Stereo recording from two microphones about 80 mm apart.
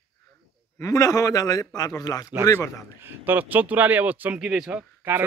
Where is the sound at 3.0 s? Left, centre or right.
Right.